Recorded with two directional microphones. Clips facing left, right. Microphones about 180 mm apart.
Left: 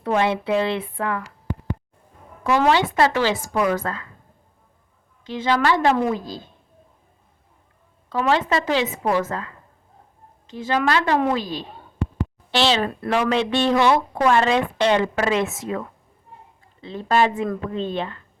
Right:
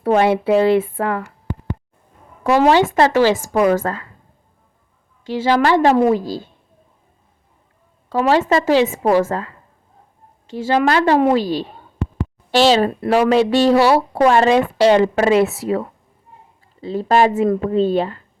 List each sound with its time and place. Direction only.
0.0 s a woman's voice: 40° right (ahead or behind)
2.9 s a woman's voice: 40° right (ahead or behind)
5.5 s a woman's voice: 40° right (ahead or behind)
6.1 s a woman's voice: 10° right (ahead or behind)
8.1 s a woman's voice: 35° right (ahead or behind)
10.7 s a woman's voice: 35° right (ahead or behind)
12.9 s speech: 25° right (ahead or behind)
13.1 s a woman's voice: 35° right (ahead or behind)